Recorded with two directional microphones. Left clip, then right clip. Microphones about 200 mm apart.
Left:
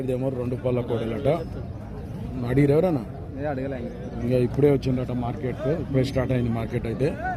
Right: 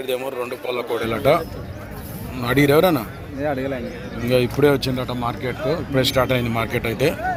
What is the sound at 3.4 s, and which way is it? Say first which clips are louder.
Speech: right 6 dB; 45° right (ahead or behind).